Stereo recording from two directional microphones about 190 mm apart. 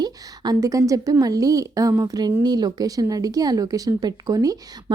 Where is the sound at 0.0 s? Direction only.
20° right (ahead or behind).